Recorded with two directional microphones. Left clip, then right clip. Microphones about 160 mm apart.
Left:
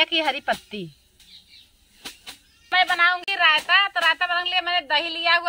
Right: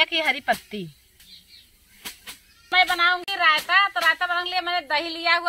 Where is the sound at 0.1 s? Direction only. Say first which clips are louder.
Even; 25° left (ahead or behind).